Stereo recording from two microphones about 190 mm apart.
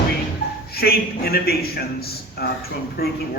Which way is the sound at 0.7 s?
55° left (ahead or behind).